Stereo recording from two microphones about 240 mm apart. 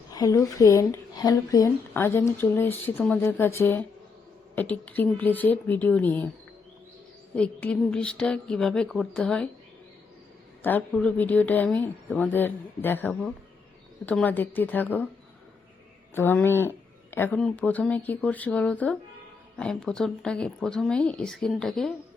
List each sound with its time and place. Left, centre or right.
0.1 s speech: centre
7.3 s speech: centre
10.6 s speech: centre
16.1 s speech: centre